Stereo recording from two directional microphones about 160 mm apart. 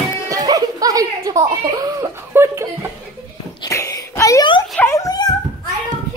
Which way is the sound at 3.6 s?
20° left (ahead or behind).